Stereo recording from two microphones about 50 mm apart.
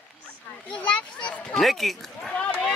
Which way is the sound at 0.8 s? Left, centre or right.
Left.